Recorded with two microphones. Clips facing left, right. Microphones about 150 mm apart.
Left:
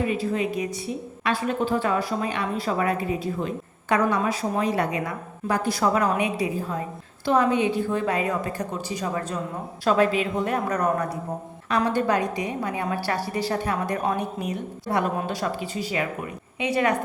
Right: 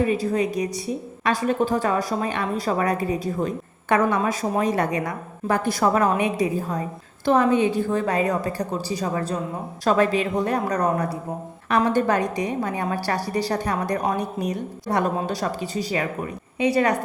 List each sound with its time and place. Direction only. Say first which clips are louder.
0.1 s a woman's voice: right 3 dB; 40° right (ahead or behind)
11.7 s a woman's voice: right 2 dB; 45° right (ahead or behind)